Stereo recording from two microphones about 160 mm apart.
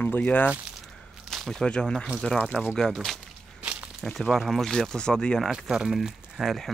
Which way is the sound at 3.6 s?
5° right (ahead or behind).